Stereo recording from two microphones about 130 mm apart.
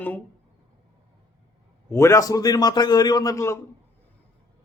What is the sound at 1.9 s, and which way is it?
A man's voice, 20° left (ahead or behind).